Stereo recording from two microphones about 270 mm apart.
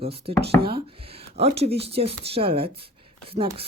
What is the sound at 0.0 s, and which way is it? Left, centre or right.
Speech, right.